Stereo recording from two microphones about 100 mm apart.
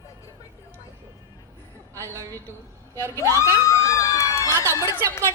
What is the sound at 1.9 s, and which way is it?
A woman's voice, 30° right (ahead or behind).